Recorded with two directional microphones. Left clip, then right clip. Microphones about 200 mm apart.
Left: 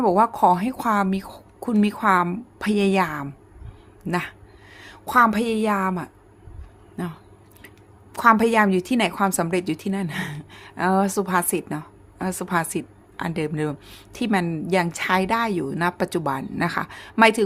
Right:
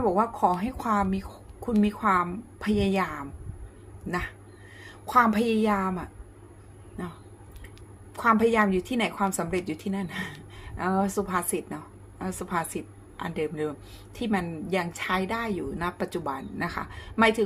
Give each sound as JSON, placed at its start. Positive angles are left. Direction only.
{"t": 0.0, "sound": "a woman's voice", "side_deg": 45}
{"t": 8.1, "sound": "a woman's voice", "side_deg": 45}